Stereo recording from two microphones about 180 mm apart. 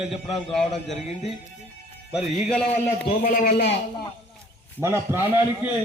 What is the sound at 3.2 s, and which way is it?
Speech, 50° left (ahead or behind).